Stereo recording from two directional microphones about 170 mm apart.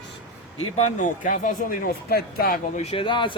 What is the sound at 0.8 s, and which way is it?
Speech, 45° left (ahead or behind).